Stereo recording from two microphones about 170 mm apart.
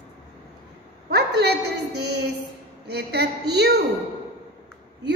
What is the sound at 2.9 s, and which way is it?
Speech, 75° right (ahead or behind).